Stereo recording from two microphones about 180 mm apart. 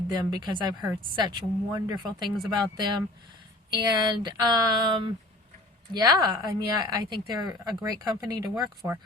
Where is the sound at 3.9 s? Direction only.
25° right (ahead or behind).